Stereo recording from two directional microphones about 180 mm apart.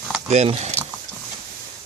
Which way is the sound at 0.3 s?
35° right (ahead or behind).